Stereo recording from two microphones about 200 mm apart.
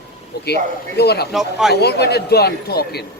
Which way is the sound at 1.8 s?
55° left (ahead or behind).